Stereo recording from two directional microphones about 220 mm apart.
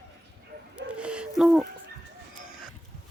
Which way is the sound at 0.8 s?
5° right (ahead or behind).